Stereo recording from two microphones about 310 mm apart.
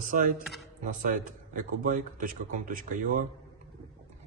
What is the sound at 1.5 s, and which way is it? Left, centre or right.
Speech, right.